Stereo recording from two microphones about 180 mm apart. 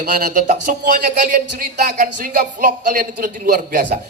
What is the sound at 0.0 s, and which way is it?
Speech, 55° right (ahead or behind).